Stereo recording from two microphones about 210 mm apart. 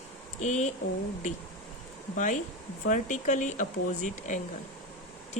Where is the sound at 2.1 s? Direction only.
35° left (ahead or behind).